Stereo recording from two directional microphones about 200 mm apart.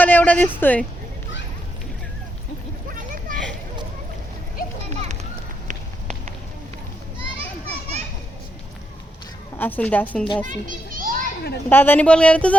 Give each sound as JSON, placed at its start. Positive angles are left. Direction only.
{"t": 0.0, "sound": "speech", "side_deg": 10}
{"t": 2.9, "sound": "a sound", "side_deg": -40}
{"t": 9.6, "sound": "speech", "side_deg": 10}
{"t": 10.4, "sound": "children playing", "side_deg": -40}
{"t": 11.7, "sound": "speech", "side_deg": 10}